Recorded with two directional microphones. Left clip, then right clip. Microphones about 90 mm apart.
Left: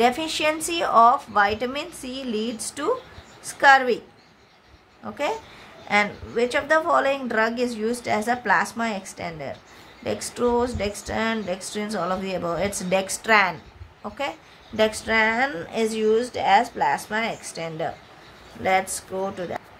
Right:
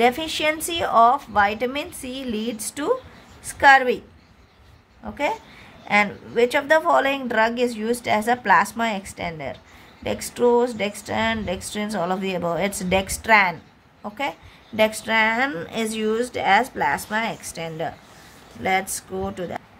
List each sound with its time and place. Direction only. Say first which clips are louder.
0.0 s a woman's voice: right 1 dB; 25° right (ahead or behind)
5.0 s a woman's voice: right 2 dB; 20° right (ahead or behind)
6.3 s a woman's voice: right 3 dB; 40° right (ahead or behind)
14.0 s a woman's voice: right 2 dB; 35° right (ahead or behind); by 17.5 s 55° right (ahead or behind)
17.6 s speech: left 1 dB; 35° right (ahead or behind)
18.6 s a woman's voice: left 1 dB; 20° right (ahead or behind)
19.2 s speech: left 1 dB; 35° right (ahead or behind)